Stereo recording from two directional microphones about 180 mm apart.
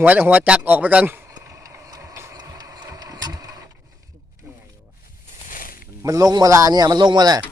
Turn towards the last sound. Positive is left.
turn(degrees=-20)  # may be behind; listen again after turning